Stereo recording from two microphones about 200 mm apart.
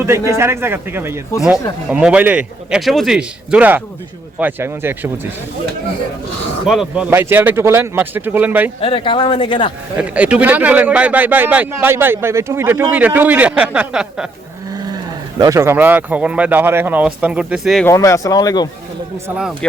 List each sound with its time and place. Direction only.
0.0 s a man's voice: 10° right (ahead or behind)
6.7 s a man's voice: 5° right (ahead or behind)
8.8 s speech: 25° left (ahead or behind)
10.0 s a man's voice: 5° right (ahead or behind)
15.4 s a man's voice: 15° right (ahead or behind)
17.8 s speech: 15° left (ahead or behind)